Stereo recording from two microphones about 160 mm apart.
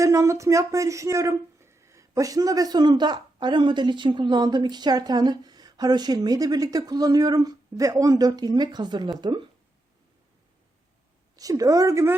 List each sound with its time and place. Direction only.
0.0 s speech: 20° right (ahead or behind)
11.3 s speech: 20° right (ahead or behind)